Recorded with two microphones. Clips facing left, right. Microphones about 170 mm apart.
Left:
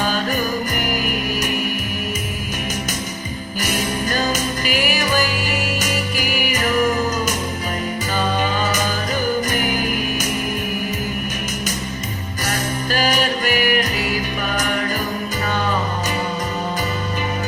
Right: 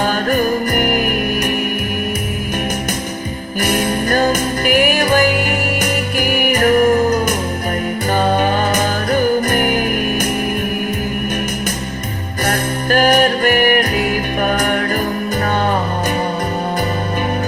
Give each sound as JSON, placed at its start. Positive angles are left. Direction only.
{"t": 0.0, "sound": "music", "side_deg": -55}
{"t": 3.6, "sound": "music", "side_deg": -60}
{"t": 12.5, "sound": "music", "side_deg": -55}